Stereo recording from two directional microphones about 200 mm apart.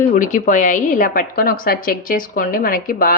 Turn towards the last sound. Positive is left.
turn(degrees=45)  # may be behind; listen again after turning